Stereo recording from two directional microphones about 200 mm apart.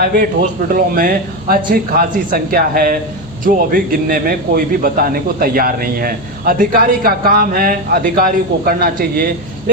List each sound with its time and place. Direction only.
0.7 s a man's voice: 45° right (ahead or behind)